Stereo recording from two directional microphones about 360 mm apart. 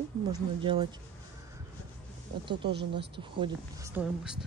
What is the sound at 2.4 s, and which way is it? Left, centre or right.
Speech, centre.